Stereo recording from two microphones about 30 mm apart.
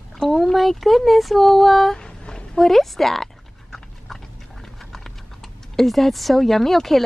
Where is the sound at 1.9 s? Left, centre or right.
Left.